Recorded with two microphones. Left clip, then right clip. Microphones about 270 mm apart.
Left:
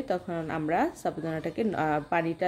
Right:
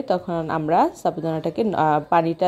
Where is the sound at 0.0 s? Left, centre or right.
Centre.